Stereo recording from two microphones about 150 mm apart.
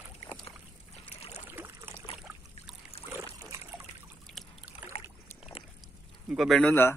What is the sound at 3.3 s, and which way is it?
Trickle, 20° right (ahead or behind).